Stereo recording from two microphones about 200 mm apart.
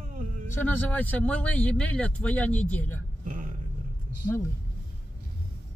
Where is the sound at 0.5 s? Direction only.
10° left (ahead or behind).